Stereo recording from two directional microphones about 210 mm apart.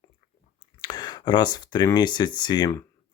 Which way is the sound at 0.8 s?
20° left (ahead or behind).